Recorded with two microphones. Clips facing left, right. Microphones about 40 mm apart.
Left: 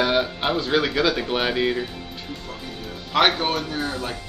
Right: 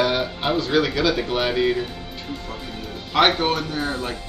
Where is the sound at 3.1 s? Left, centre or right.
Centre.